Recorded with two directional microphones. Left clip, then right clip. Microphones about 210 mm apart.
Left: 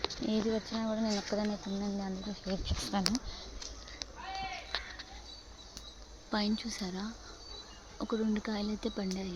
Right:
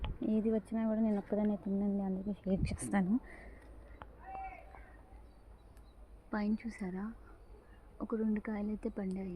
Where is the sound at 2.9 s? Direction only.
15° right (ahead or behind).